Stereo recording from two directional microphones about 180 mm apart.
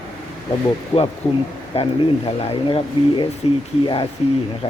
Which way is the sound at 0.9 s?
30° left (ahead or behind).